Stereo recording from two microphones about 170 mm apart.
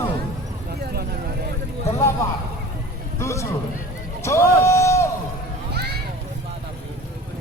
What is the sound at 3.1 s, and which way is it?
Speech, 15° left (ahead or behind).